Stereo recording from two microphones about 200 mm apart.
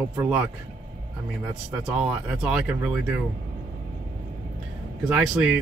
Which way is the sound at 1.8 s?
5° right (ahead or behind).